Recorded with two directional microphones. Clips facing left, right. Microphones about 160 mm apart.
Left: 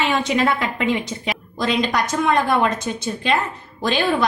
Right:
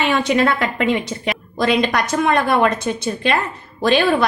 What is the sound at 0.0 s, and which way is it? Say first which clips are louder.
A woman's voice: right 3 dB; 60° right (ahead or behind).